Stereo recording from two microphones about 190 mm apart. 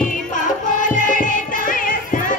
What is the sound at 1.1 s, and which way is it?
Music, 45° left (ahead or behind).